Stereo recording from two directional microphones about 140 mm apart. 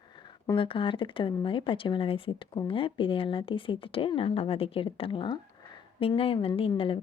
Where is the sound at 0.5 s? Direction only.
40° left (ahead or behind).